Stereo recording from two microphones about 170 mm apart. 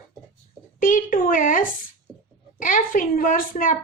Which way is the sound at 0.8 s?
55° left (ahead or behind).